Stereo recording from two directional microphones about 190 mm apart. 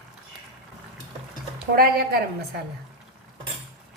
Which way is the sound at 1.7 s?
55° right (ahead or behind).